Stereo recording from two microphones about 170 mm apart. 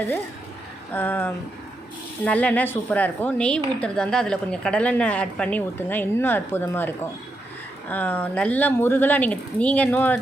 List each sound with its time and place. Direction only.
0.9 s a woman's voice: 10° left (ahead or behind)